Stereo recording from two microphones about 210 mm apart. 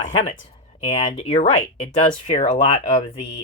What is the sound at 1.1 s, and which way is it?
Speech, 35° left (ahead or behind).